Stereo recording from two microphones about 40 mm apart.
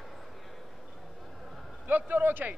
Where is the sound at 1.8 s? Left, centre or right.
Right.